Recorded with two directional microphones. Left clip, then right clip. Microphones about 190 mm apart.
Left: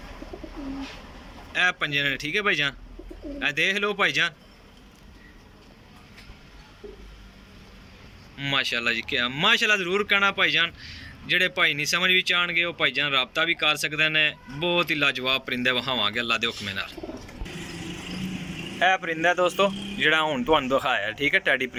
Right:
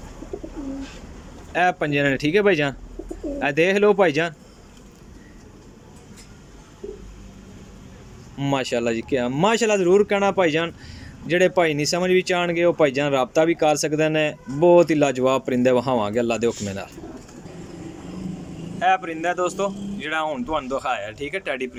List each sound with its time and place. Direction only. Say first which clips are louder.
1.5 s speech: right 3 dB; 45° right (ahead or behind)
8.4 s speech: right 2 dB; 40° right (ahead or behind)
18.8 s speech: right 1 dB; 5° right (ahead or behind)